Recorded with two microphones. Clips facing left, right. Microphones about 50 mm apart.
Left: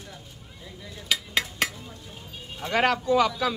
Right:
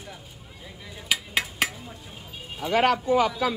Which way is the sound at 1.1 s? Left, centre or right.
Centre.